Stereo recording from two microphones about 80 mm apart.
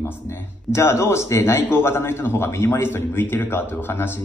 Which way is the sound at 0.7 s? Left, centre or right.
Left.